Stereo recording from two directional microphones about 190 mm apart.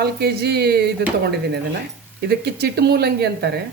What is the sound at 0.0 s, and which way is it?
A man's voice, 55° right (ahead or behind).